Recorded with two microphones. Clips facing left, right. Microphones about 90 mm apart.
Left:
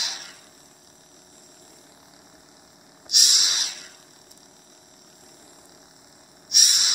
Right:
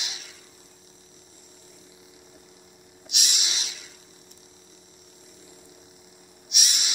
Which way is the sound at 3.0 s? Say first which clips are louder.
Left 2 dB; 65° left (ahead or behind).